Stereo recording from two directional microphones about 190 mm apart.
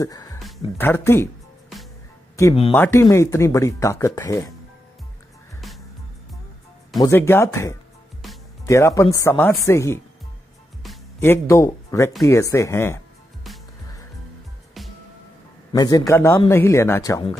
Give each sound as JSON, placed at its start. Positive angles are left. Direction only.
{"t": 0.0, "sound": "speech", "side_deg": 20}
{"t": 2.7, "sound": "speech", "side_deg": 10}
{"t": 7.0, "sound": "speech", "side_deg": 10}
{"t": 11.1, "sound": "speech", "side_deg": 15}
{"t": 15.7, "sound": "a man's voice", "side_deg": 20}